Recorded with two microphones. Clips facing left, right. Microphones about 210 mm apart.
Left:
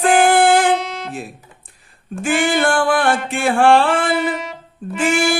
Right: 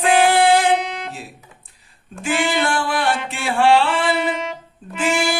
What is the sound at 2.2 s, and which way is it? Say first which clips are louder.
Music: left 3 dB; 50° left (ahead or behind).